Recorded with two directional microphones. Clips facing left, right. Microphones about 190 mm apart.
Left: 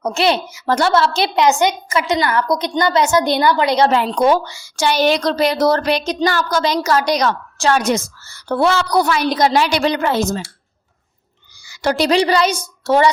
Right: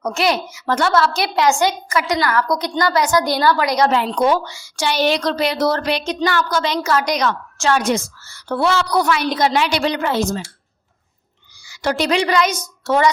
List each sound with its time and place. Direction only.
0.0 s a woman's voice: 30° left (ahead or behind)
3.9 s a woman's voice: 40° left (ahead or behind)
11.7 s a woman's voice: 40° left (ahead or behind)